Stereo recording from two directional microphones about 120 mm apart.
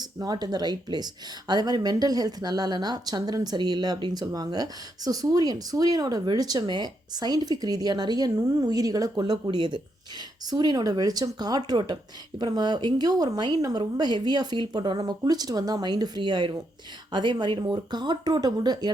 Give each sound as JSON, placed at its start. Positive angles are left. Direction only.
{"t": 0.0, "sound": "speech", "side_deg": -35}